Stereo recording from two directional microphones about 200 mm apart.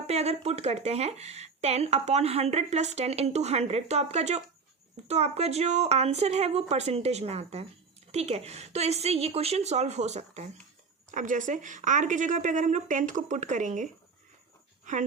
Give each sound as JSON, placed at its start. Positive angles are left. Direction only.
{"t": 0.1, "sound": "speech", "side_deg": -30}